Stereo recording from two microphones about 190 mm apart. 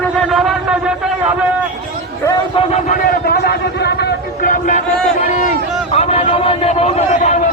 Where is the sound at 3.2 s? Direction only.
55° left (ahead or behind).